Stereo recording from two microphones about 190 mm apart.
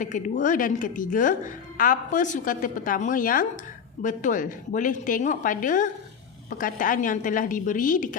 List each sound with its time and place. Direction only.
0.0 s a woman's voice: 45° left (ahead or behind)